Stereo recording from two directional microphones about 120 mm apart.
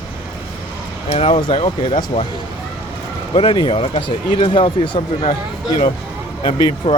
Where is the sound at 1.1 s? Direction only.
50° left (ahead or behind).